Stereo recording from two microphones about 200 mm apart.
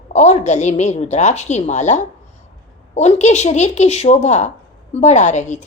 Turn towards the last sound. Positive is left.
turn(degrees=35)  # may be behind; listen again after turning